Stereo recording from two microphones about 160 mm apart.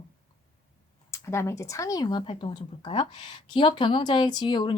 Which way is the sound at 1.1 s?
15° left (ahead or behind).